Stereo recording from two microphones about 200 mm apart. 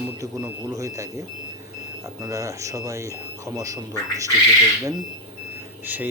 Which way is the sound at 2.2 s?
15° right (ahead or behind).